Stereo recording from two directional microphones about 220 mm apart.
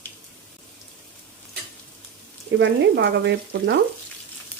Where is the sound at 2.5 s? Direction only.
50° right (ahead or behind).